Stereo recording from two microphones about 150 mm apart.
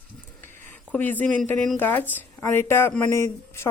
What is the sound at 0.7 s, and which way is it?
Speech, 10° left (ahead or behind).